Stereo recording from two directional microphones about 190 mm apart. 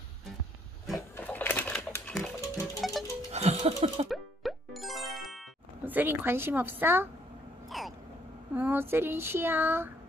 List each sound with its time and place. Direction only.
1.1 s music: 10° left (ahead or behind)
2.8 s music: centre (ahead or behind)
3.3 s music: 35° right (ahead or behind)
4.1 s music: centre (ahead or behind)
5.9 s speech: 10° right (ahead or behind)
7.7 s a sound: centre (ahead or behind)
8.5 s speech: 10° right (ahead or behind)